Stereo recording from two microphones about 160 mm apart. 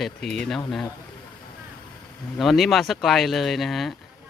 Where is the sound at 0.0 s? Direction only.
Centre (ahead or behind).